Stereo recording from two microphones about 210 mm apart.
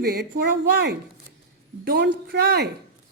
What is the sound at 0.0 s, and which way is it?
A woman's voice, 50° right (ahead or behind).